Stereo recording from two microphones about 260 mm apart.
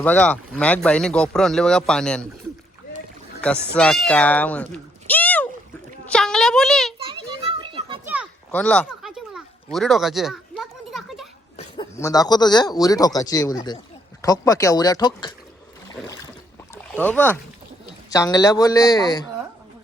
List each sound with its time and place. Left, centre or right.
0.0 s speech: centre
3.8 s speech: centre
6.1 s a sound: centre
7.6 s children playing: centre
8.0 s a sound: centre
8.5 s a sound: centre
11.5 s speech: centre
15.9 s boat: centre
16.7 s rowboat: centre
18.1 s speech: centre